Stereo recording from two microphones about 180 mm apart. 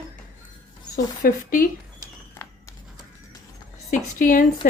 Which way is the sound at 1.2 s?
50° left (ahead or behind).